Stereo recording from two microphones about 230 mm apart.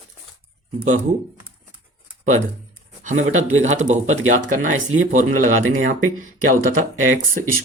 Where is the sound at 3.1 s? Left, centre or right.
Right.